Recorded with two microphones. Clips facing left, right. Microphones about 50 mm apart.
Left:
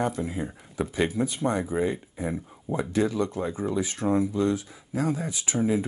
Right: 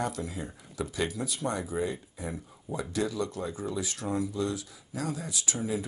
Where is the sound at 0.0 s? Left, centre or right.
Left.